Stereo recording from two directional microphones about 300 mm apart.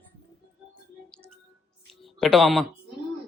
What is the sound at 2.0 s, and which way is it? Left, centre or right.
Speech, centre.